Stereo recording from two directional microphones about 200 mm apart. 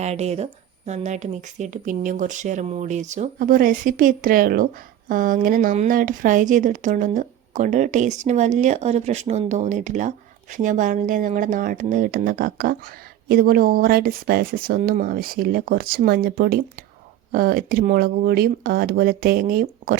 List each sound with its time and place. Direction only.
0.0 s speech: 35° right (ahead or behind)